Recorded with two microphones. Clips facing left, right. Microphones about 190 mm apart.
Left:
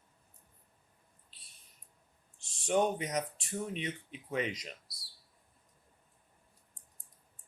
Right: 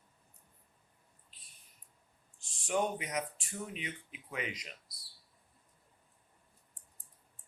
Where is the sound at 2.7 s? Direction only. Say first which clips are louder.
Left 4 dB; 40° left (ahead or behind).